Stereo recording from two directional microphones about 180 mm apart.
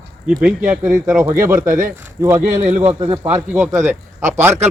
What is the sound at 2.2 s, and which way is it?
Speech, 15° right (ahead or behind).